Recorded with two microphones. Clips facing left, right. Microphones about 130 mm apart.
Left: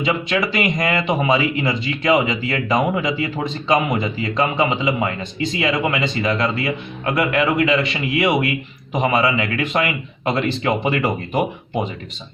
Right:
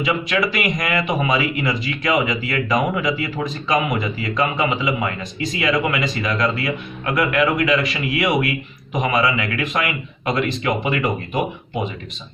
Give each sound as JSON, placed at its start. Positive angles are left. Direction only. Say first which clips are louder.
{"t": 0.0, "sound": "speech", "louder": "even", "side_deg": 25}